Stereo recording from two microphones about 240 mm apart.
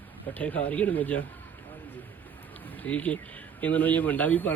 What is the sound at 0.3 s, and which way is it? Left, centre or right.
Speech, centre.